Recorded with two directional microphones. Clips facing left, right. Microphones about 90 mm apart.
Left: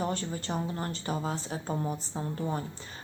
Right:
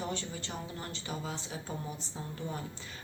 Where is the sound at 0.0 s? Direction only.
45° left (ahead or behind).